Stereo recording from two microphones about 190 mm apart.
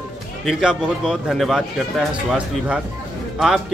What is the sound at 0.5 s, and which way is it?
Speech, 5° right (ahead or behind).